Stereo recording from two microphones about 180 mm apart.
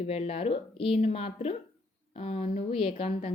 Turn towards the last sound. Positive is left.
turn(degrees=35)  # may be behind; listen again after turning